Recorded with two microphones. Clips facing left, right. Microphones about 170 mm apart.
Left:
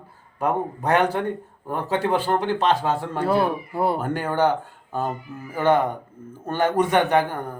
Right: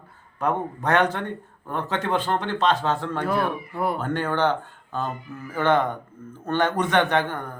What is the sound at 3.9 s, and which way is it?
A man's voice, 10° left (ahead or behind).